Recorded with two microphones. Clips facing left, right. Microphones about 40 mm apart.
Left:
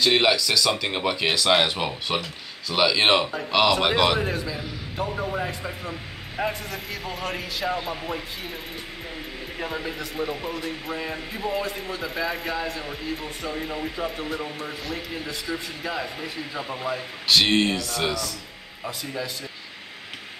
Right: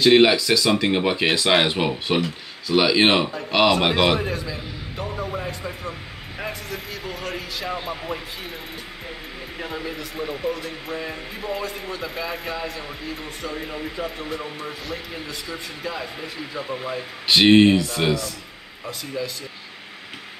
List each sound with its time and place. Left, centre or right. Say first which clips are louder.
0.0 s speech: right 5 dB; centre
4.2 s speech: even; centre
9.6 s speech: even; centre
17.3 s speech: right 6 dB; right
18.9 s speech: right 2 dB; centre